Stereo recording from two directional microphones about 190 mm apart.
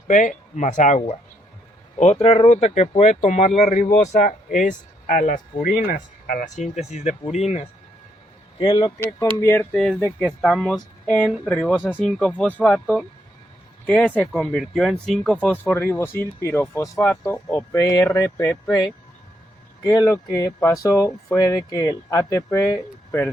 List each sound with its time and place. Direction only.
0.1 s speech: 40° left (ahead or behind); by 23.3 s 15° left (ahead or behind)